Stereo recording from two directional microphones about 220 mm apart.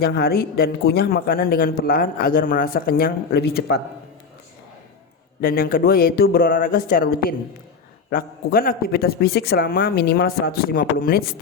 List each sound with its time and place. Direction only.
0.0 s speech: 45° left (ahead or behind)
5.4 s speech: 40° left (ahead or behind)